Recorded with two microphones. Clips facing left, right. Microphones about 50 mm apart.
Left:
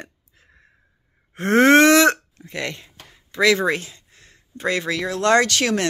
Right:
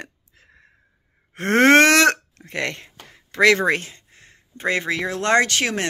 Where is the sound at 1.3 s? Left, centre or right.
Right.